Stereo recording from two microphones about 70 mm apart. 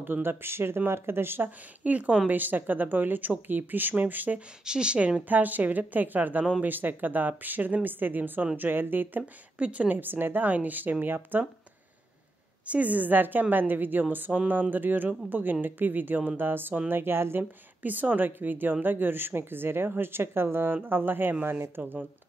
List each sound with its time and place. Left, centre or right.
0.0 s speech: right
4.6 s speech: centre
12.6 s speech: right